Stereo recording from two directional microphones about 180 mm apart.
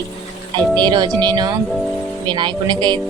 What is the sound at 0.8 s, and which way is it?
A woman's voice, 25° right (ahead or behind).